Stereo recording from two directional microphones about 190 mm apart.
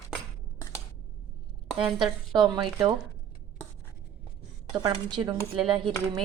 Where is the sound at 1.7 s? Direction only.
5° right (ahead or behind).